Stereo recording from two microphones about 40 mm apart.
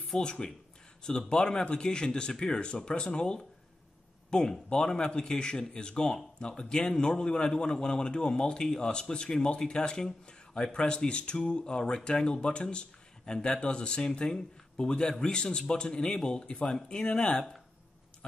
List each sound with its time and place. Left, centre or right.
0.1 s speech: left
16.6 s speech: centre
17.0 s speech: left